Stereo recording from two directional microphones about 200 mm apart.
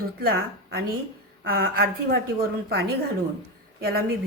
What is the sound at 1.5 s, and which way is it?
A woman's voice, 50° right (ahead or behind).